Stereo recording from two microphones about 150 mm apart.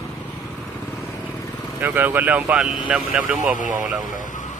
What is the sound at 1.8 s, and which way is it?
Speech, 15° right (ahead or behind).